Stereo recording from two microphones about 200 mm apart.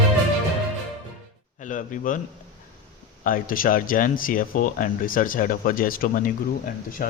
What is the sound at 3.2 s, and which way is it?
Speech, 45° left (ahead or behind).